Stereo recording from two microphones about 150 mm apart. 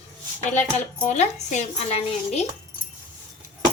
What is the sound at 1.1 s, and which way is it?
Speech, 50° left (ahead or behind).